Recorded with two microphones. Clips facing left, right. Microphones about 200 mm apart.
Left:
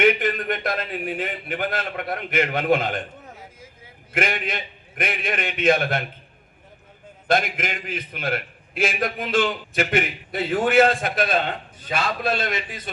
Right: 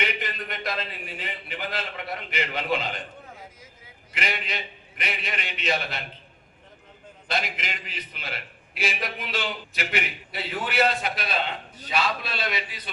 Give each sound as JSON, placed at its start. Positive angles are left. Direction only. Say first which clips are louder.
{"t": 0.0, "sound": "a man's voice", "louder": "left 11 dB", "side_deg": 50}
{"t": 4.1, "sound": "a man's voice", "louder": "left 7 dB", "side_deg": 50}
{"t": 7.3, "sound": "a man's voice", "louder": "left 8 dB", "side_deg": 50}